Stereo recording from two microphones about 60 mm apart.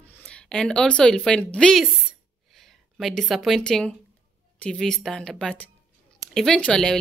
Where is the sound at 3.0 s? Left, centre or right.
Centre.